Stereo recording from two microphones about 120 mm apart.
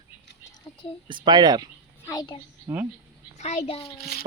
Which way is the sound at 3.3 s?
70° left (ahead or behind).